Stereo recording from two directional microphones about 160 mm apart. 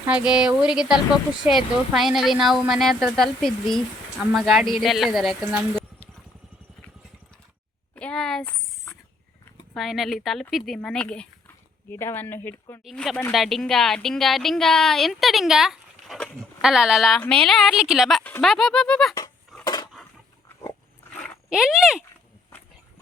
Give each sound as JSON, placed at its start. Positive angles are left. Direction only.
{"t": 0.1, "sound": "speech", "side_deg": -5}
{"t": 7.9, "sound": "a sound", "side_deg": 5}
{"t": 9.7, "sound": "speech", "side_deg": 0}
{"t": 12.8, "sound": "speech", "side_deg": 0}
{"t": 18.2, "sound": "speech", "side_deg": 10}
{"t": 19.6, "sound": "a sound", "side_deg": 25}
{"t": 21.5, "sound": "speech", "side_deg": -5}